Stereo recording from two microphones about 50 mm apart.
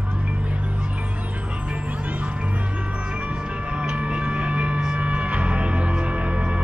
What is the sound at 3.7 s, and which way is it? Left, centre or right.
Music, right.